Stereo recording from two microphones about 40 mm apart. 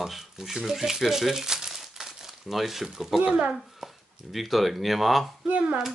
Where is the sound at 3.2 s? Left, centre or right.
Right.